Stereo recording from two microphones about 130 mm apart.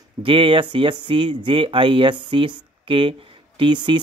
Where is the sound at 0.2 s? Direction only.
40° right (ahead or behind).